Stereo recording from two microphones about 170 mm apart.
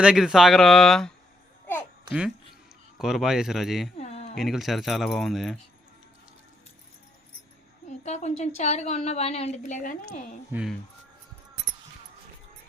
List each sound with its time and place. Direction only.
0.0 s speech: 5° right (ahead or behind)
3.9 s a sound: 40° left (ahead or behind)
4.4 s speech: centre (ahead or behind)
7.9 s a woman's voice: 40° left (ahead or behind)
10.5 s speech: 5° right (ahead or behind)